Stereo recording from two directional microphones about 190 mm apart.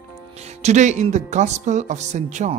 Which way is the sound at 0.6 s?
35° right (ahead or behind).